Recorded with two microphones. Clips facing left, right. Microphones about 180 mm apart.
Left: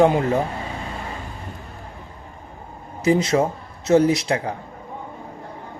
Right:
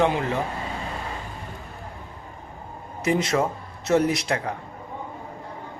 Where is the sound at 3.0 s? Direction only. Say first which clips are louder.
Left 4 dB; 30° left (ahead or behind).